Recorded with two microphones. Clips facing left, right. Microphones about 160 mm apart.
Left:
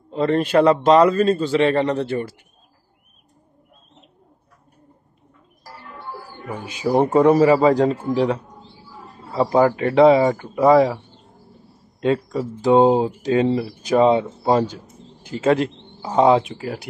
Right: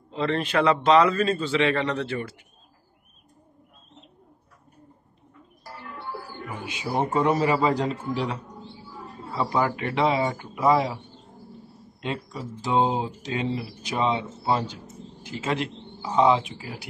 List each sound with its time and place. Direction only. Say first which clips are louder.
0.1 s a man's voice: left 7 dB; 45° left (ahead or behind)
6.6 s a man's voice: left 9 dB; 40° left (ahead or behind)
12.0 s speech: left 12 dB; 40° left (ahead or behind); by 16.8 s 60° left (ahead or behind)